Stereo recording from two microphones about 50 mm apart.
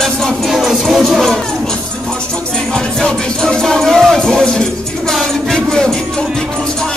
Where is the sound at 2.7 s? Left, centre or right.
Centre.